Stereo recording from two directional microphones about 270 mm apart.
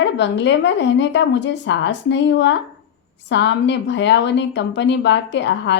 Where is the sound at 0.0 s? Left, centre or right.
Left.